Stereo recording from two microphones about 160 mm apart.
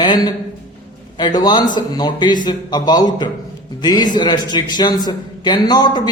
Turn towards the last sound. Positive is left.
turn(degrees=25)  # may be behind; listen again after turning